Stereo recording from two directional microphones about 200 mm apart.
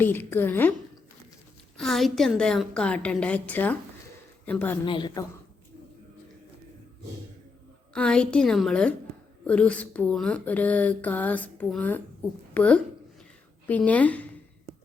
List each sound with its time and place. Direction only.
0.0 s speech: 10° left (ahead or behind)
1.8 s a woman's voice: centre (ahead or behind)
4.9 s a woman's voice: 25° left (ahead or behind)
7.9 s a woman's voice: 5° left (ahead or behind)